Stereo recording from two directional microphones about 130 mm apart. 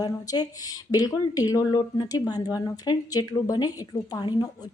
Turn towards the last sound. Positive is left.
turn(degrees=35)  # may be behind; listen again after turning